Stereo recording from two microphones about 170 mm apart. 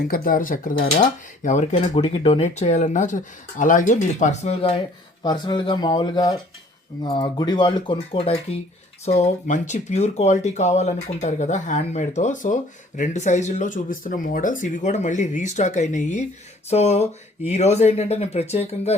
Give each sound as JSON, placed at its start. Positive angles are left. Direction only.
{"t": 0.1, "sound": "speech", "side_deg": 55}